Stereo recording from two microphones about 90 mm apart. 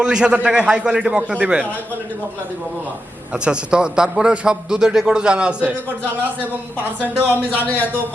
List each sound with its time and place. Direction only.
0.0 s a man's voice: 10° right (ahead or behind)
3.3 s a man's voice: 10° right (ahead or behind)
7.0 s speech: 20° right (ahead or behind)